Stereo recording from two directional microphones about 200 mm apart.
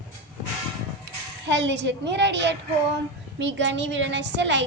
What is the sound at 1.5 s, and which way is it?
A woman's voice, 60° right (ahead or behind).